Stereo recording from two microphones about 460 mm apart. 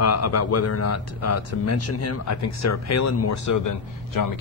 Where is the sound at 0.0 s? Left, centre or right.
Left.